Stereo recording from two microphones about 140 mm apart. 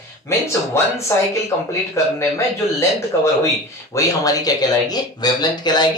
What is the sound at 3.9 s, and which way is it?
Speech, 25° left (ahead or behind).